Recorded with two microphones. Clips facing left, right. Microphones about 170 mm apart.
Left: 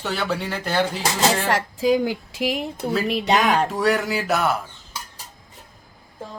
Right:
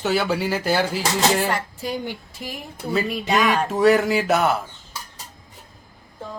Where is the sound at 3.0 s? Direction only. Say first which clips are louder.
Left 2 dB; 70° left (ahead or behind).